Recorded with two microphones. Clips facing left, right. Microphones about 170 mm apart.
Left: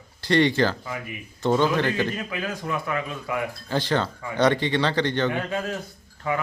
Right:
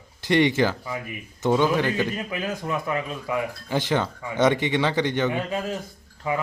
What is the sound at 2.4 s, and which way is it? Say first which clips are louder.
A man's voice: right 2 dB; 25° right (ahead or behind).